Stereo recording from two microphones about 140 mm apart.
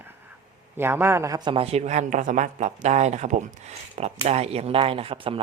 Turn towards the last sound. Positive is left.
turn(degrees=-40)  # may be behind; listen again after turning